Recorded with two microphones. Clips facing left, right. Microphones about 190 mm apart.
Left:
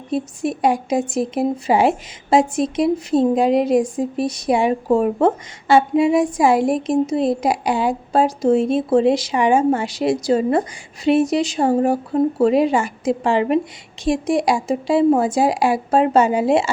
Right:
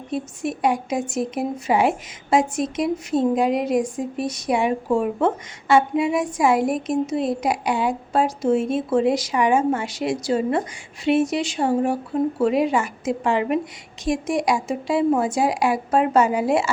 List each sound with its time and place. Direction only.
0.1 s speech: 35° left (ahead or behind)